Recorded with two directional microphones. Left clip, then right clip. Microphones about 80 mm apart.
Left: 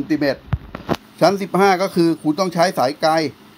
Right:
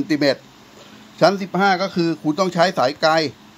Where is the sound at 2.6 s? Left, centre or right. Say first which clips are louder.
Even; left.